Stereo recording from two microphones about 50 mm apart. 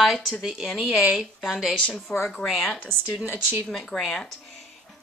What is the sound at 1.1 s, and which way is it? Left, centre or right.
Speech, centre.